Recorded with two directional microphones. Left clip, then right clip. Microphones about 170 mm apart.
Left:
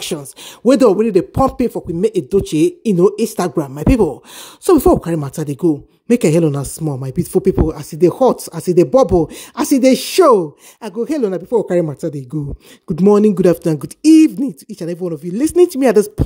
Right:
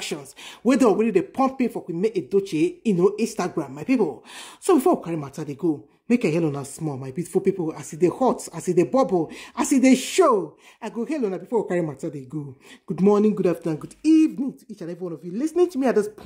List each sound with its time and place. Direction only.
0.7 s speech: 35° left (ahead or behind)
6.4 s speech: 40° left (ahead or behind)